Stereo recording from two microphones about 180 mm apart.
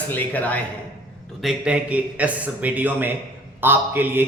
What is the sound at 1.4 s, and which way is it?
A man's voice, 5° right (ahead or behind).